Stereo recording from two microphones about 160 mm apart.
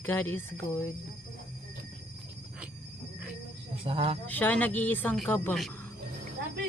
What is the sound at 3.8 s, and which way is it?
Speech, 35° right (ahead or behind).